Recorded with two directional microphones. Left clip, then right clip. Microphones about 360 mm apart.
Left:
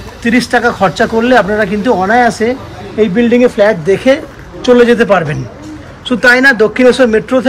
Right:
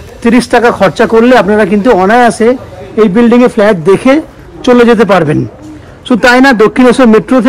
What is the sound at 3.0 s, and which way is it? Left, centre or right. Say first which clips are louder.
A man's voice: right 3 dB; centre.